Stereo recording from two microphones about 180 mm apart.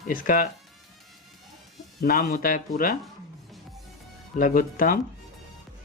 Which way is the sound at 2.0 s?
55° left (ahead or behind).